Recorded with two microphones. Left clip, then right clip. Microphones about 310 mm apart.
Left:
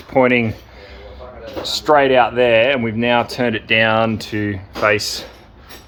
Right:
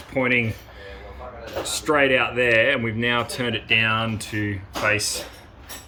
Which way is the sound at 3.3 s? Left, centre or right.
Centre.